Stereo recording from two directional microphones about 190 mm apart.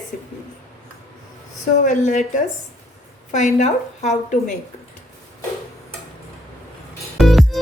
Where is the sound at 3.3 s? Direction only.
40° left (ahead or behind).